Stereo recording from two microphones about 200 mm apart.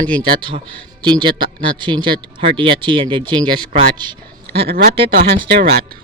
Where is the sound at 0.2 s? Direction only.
25° right (ahead or behind).